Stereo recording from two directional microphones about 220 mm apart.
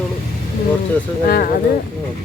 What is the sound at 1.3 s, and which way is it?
Speech, 40° left (ahead or behind).